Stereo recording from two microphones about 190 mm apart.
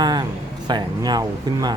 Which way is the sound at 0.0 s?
20° right (ahead or behind).